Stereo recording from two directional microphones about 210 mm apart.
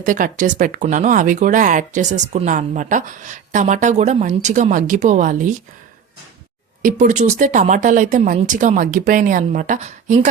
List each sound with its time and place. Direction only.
0.0 s speech: 40° right (ahead or behind)
6.8 s speech: 35° right (ahead or behind)